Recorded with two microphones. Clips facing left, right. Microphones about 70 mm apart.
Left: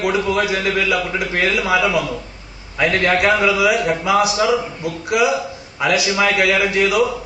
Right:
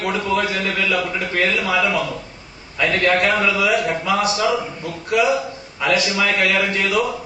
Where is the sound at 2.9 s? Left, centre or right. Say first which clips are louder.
Even; centre.